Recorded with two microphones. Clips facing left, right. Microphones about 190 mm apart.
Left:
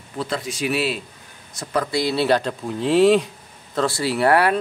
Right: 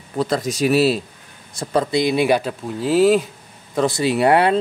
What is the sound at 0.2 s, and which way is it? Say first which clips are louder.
Speech: right 6 dB; 40° right (ahead or behind).